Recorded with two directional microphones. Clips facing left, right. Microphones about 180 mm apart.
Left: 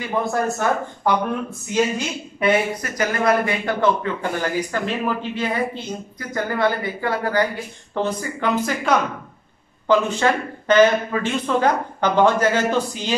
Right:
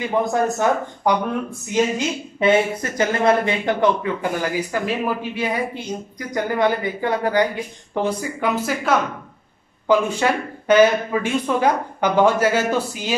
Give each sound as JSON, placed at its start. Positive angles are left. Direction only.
{"t": 0.0, "sound": "speech", "side_deg": -20}
{"t": 2.4, "sound": "a woman's voice", "side_deg": -25}